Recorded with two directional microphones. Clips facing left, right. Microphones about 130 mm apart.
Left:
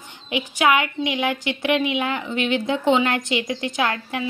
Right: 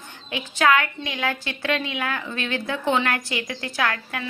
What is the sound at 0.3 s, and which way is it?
A woman's voice, 15° left (ahead or behind).